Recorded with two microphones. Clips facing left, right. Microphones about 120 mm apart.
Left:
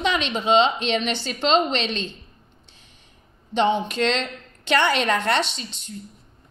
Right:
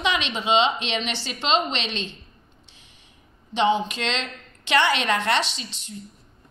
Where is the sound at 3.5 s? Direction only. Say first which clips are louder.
Left 1 dB; 50° left (ahead or behind).